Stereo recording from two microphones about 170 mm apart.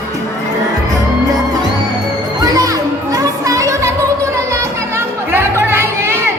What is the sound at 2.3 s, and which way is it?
Music, 20° right (ahead or behind).